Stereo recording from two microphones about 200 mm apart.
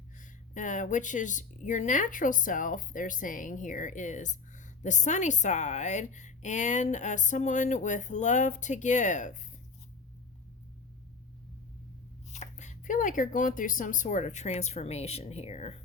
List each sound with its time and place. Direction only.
0.2 s speech: 40° left (ahead or behind)
12.3 s speech: 35° left (ahead or behind)